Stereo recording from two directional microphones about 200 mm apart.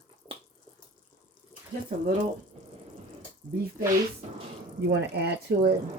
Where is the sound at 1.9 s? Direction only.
35° right (ahead or behind).